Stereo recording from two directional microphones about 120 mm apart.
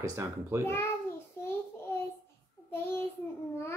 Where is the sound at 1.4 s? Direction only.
20° left (ahead or behind).